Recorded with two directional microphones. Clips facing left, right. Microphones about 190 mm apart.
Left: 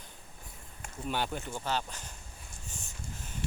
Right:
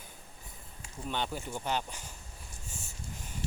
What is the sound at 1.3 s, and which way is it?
Speech, 10° right (ahead or behind).